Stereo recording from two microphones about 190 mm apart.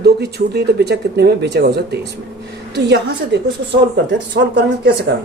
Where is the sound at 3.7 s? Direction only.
65° right (ahead or behind).